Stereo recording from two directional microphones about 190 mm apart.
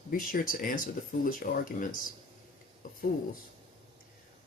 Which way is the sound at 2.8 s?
45° left (ahead or behind).